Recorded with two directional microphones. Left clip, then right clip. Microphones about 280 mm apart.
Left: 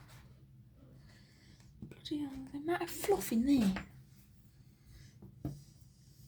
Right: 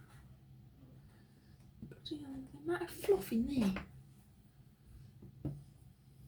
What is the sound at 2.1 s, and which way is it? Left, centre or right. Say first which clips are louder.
A woman's voice: left 8 dB; left.